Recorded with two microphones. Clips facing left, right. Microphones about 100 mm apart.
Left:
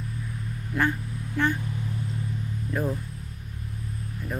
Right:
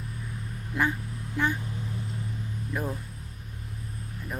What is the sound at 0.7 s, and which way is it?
Vehicle, 20° right (ahead or behind).